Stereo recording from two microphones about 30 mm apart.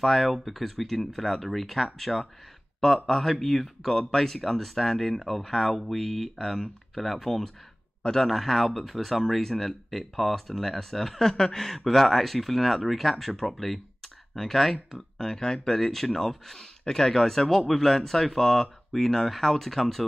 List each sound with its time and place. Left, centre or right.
0.0 s speech: centre
11.1 s speech: centre
15.8 s speech: centre